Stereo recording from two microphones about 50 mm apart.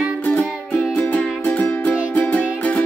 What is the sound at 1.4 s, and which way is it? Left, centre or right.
Music, left.